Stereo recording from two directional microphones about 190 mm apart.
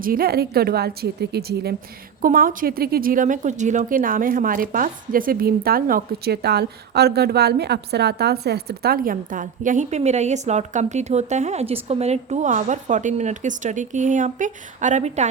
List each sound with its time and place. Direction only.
0.0 s a woman's voice: 50° right (ahead or behind)